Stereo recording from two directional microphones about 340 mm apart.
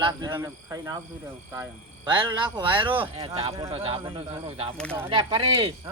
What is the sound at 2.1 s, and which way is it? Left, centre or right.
A man's voice, centre.